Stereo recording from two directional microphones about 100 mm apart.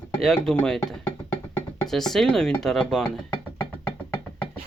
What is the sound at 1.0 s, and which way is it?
Music, 20° left (ahead or behind).